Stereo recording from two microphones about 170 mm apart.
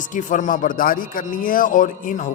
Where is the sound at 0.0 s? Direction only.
50° left (ahead or behind).